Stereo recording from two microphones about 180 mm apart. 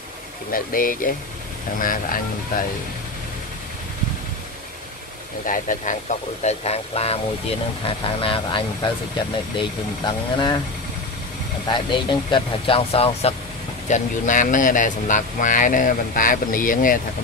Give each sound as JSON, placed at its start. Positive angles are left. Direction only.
{"t": 0.5, "sound": "speech", "side_deg": 50}
{"t": 5.5, "sound": "speech", "side_deg": 45}
{"t": 11.7, "sound": "speech", "side_deg": 25}